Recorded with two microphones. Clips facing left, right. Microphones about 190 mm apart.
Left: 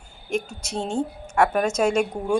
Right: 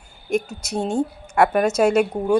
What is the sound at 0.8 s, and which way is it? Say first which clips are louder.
Speech: right 4 dB; 40° right (ahead or behind).